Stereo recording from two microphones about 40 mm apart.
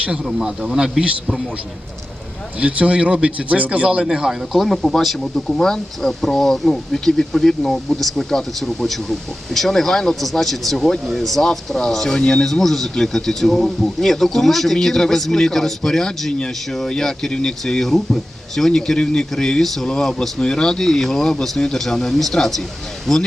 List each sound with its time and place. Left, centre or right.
0.7 s speech: centre
2.6 s speech: right
4.3 s speech: centre
12.5 s speech: centre
19.6 s speech: centre
19.9 s speech: centre